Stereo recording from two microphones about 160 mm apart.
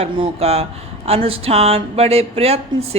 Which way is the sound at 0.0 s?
40° right (ahead or behind).